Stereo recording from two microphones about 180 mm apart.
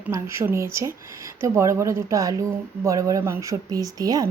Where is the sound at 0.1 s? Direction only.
15° right (ahead or behind).